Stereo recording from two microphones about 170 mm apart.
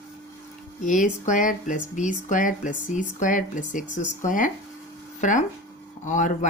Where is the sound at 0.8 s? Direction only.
50° left (ahead or behind).